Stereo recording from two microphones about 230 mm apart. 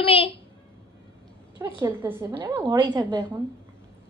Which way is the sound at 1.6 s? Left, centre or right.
Centre.